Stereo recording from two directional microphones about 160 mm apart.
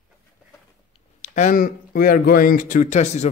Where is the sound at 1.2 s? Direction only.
50° left (ahead or behind).